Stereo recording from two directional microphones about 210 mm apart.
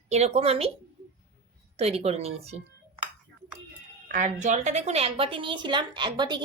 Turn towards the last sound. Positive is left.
turn(degrees=-20)  # may be behind; listen again after turning